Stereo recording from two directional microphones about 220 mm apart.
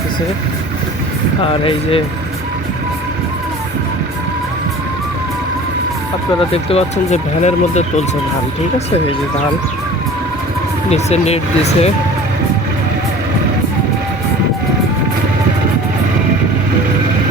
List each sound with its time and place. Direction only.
6.5 s speech: 25° left (ahead or behind)
10.8 s speech: 30° left (ahead or behind)